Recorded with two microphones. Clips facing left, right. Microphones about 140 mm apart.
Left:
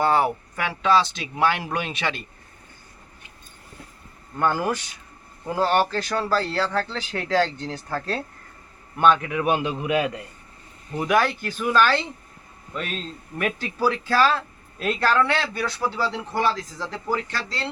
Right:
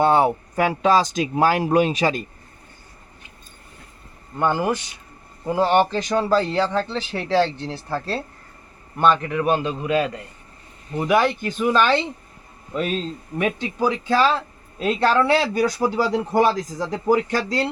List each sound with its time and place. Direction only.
0.0 s speech: 25° right (ahead or behind)
4.4 s a man's voice: 15° right (ahead or behind)
11.2 s a man's voice: 15° right (ahead or behind)
12.7 s speech: 30° right (ahead or behind)
16.8 s a man's voice: 15° right (ahead or behind)
17.3 s speech: 45° right (ahead or behind)